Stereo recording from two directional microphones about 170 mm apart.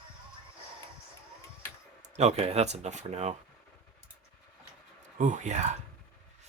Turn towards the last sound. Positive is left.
turn(degrees=-45)  # may be behind; listen again after turning